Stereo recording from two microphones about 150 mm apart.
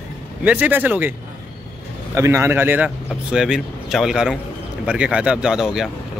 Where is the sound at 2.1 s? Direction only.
15° right (ahead or behind).